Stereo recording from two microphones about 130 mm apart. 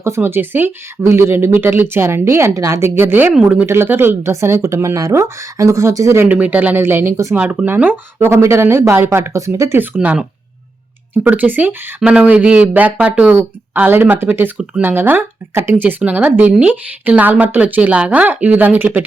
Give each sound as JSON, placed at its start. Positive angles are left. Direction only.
{"t": 0.0, "sound": "speech", "side_deg": -20}
{"t": 6.2, "sound": "speech", "side_deg": -10}
{"t": 7.3, "sound": "speech", "side_deg": -10}